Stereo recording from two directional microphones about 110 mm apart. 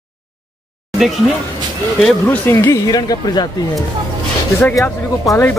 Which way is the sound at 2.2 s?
15° left (ahead or behind).